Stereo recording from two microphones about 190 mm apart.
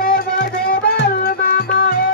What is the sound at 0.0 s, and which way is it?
Music, 50° left (ahead or behind).